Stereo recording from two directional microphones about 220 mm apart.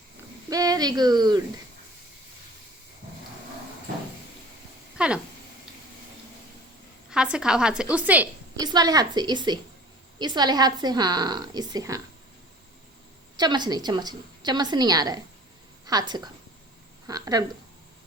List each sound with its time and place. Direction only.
0.5 s speech: 15° right (ahead or behind)
4.9 s cat: 5° right (ahead or behind)
7.1 s a woman's voice: 5° right (ahead or behind)
8.6 s a woman's voice: 15° right (ahead or behind)
13.3 s a woman's voice: 20° right (ahead or behind)